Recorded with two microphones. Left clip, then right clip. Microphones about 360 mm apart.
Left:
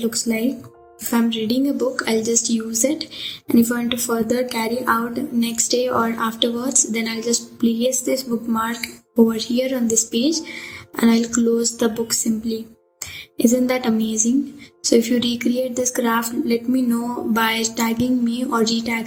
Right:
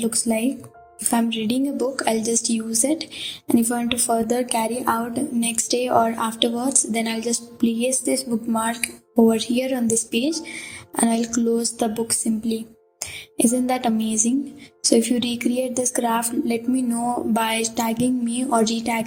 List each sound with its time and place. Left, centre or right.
0.0 s a woman's voice: centre